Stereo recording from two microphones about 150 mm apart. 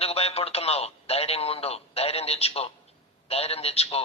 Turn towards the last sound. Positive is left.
turn(degrees=40)  # may be behind; listen again after turning